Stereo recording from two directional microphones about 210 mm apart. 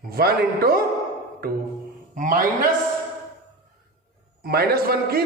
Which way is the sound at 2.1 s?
40° right (ahead or behind).